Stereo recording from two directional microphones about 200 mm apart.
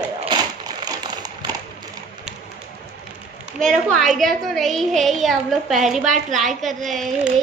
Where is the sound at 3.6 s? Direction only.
Centre (ahead or behind).